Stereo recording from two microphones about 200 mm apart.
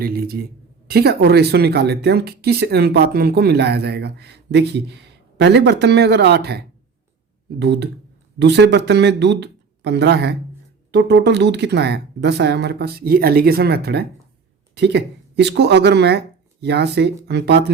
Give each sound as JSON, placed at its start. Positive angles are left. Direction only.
{"t": 0.0, "sound": "speech", "side_deg": -50}